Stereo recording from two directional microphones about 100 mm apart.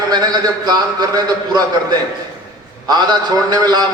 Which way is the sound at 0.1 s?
45° right (ahead or behind).